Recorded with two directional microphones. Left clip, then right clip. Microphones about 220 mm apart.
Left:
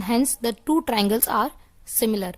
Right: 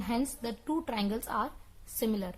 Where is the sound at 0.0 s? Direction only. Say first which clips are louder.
Left 11 dB; 45° left (ahead or behind).